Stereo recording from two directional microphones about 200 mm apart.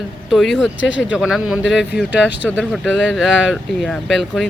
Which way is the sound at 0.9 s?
65° left (ahead or behind).